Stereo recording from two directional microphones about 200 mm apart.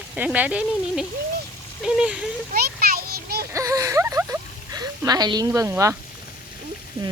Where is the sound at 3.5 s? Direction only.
15° right (ahead or behind).